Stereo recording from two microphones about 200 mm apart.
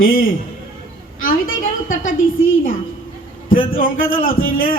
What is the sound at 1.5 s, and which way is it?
A woman's voice, 80° left.